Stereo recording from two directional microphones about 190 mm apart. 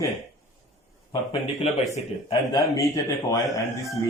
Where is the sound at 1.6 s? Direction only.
35° left (ahead or behind).